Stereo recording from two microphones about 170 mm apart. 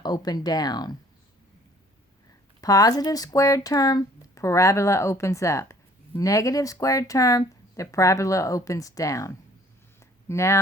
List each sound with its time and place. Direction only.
0.0 s speech: 25° left (ahead or behind)
2.6 s speech: 20° left (ahead or behind)